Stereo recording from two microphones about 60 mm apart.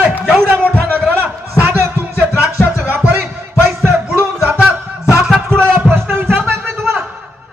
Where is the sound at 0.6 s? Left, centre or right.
Left.